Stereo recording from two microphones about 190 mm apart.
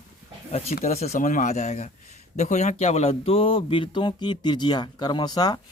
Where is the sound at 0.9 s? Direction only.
35° left (ahead or behind).